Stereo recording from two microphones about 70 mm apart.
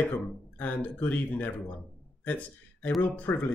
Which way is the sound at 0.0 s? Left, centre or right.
Left.